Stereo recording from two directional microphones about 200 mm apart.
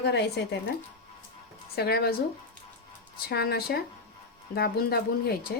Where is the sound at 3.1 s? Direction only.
55° left (ahead or behind).